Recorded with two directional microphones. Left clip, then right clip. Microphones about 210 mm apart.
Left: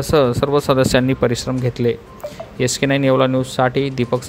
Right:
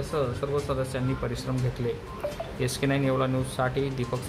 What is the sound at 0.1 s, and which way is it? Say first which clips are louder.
Speech: left 14 dB; 45° left (ahead or behind).